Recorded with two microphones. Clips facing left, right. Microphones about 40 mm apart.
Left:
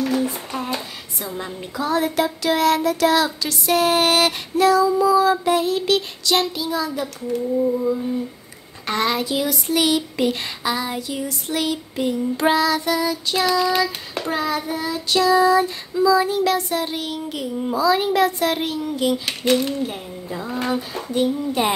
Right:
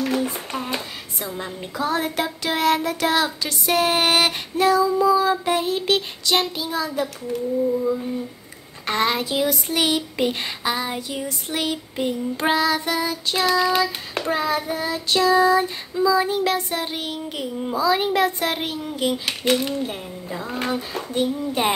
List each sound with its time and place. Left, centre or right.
0.2 s a sound: centre
1.8 s child singing: right
7.0 s child singing: centre
8.8 s child singing: right
9.2 s child singing: right
13.5 s speech: centre
14.1 s child singing: right
19.2 s speech: centre
21.1 s child singing: right